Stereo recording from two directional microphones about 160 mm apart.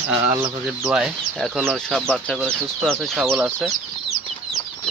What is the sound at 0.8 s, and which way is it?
Speech, 5° right (ahead or behind).